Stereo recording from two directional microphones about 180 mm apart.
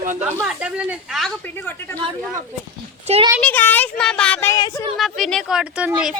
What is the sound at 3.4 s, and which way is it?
Speech, 10° left (ahead or behind).